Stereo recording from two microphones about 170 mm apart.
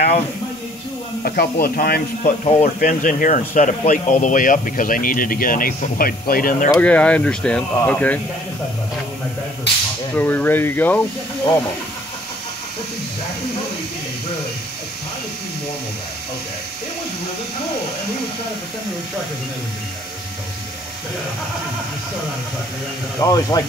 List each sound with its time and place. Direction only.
1.2 s speech: 60° left (ahead or behind)
2.2 s speech: 35° left (ahead or behind)
2.8 s speech: 50° left (ahead or behind)
6.7 s speech: 10° left (ahead or behind)
10.1 s speech: 10° left (ahead or behind)
23.1 s speech: 20° left (ahead or behind)